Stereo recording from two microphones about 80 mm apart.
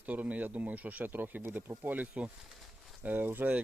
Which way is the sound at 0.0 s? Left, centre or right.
Centre.